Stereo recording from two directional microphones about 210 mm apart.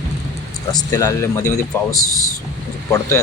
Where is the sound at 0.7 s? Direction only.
15° left (ahead or behind).